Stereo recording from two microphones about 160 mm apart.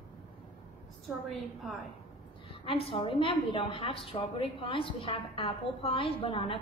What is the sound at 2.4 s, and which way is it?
A woman's voice, 35° left (ahead or behind).